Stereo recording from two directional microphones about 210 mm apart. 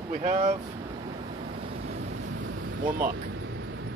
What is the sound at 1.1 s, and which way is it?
Waves, 35° right (ahead or behind).